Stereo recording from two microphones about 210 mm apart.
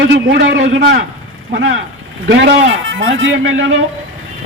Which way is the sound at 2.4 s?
55° right (ahead or behind).